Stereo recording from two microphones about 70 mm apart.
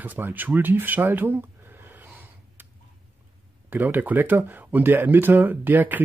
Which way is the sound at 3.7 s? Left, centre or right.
Right.